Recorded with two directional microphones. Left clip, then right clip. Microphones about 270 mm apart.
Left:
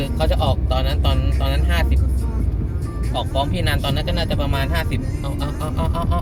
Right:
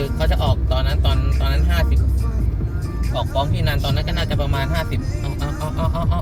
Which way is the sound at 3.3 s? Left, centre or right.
Centre.